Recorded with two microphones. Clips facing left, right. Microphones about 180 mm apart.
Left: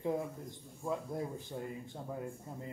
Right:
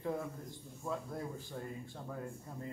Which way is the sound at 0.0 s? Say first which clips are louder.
Left 3 dB; 20° left (ahead or behind).